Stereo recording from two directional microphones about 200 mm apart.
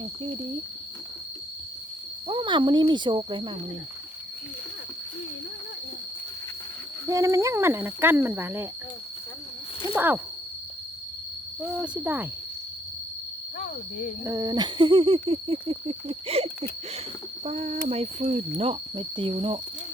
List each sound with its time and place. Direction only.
2.2 s hoot: 25° right (ahead or behind)
7.1 s speech: 15° right (ahead or behind)
9.9 s speech: 10° right (ahead or behind)
11.6 s speech: 5° right (ahead or behind)
14.3 s hoot: 15° right (ahead or behind)